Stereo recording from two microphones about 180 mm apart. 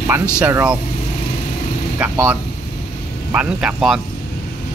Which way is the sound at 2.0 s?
10° right (ahead or behind).